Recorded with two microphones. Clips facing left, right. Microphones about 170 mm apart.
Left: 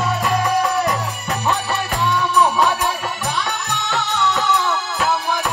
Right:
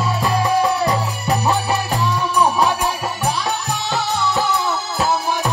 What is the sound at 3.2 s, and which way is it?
Music, 35° right (ahead or behind).